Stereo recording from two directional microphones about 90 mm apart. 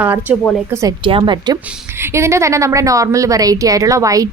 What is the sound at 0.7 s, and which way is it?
Speech, 35° right (ahead or behind).